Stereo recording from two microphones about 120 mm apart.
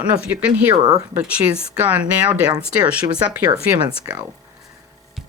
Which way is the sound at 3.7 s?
30° right (ahead or behind).